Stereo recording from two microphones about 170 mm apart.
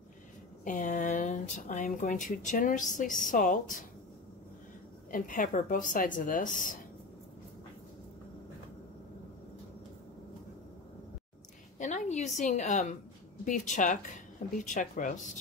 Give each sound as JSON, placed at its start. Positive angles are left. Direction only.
{"t": 0.7, "sound": "speech", "side_deg": 45}
{"t": 5.1, "sound": "speech", "side_deg": 50}
{"t": 11.8, "sound": "a sound", "side_deg": 45}
{"t": 13.5, "sound": "speech", "side_deg": 45}